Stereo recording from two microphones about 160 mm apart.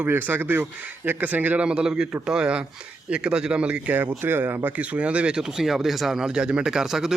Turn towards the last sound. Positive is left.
turn(degrees=-5)  # may be behind; listen again after turning